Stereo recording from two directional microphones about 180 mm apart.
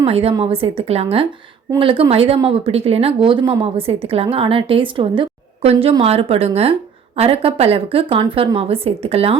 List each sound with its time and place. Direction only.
0.0 s speech: 30° right (ahead or behind)